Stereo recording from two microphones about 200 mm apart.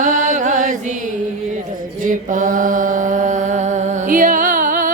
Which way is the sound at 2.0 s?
40° right (ahead or behind).